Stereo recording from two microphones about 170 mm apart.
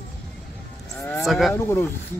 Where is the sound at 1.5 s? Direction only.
15° left (ahead or behind).